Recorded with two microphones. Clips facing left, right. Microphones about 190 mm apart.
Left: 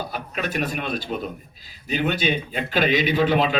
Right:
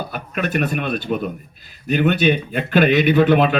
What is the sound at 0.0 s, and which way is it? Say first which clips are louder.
A man's voice: right 4 dB; 55° right (ahead or behind).